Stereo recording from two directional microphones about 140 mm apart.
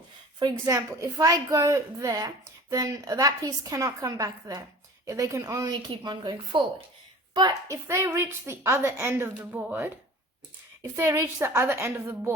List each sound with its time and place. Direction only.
0.6 s a woman's voice: 20° right (ahead or behind)
10.9 s a woman's voice: 20° right (ahead or behind)